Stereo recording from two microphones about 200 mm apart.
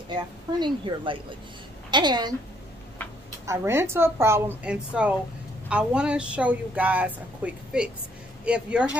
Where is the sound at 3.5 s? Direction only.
15° right (ahead or behind).